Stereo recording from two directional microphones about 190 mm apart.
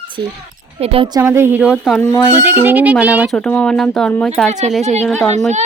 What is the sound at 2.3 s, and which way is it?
Speech, 10° right (ahead or behind).